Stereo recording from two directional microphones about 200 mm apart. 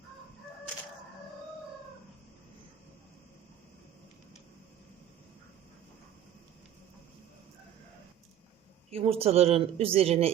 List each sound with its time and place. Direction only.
8.9 s speech: 30° right (ahead or behind)